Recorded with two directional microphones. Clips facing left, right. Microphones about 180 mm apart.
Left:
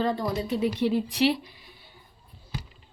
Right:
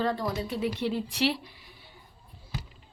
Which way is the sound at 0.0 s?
20° left (ahead or behind).